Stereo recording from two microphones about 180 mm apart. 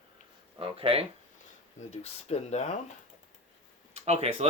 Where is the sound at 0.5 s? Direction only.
30° right (ahead or behind).